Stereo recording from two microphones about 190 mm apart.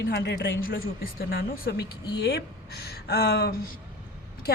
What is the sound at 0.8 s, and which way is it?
A woman's voice, 55° left (ahead or behind).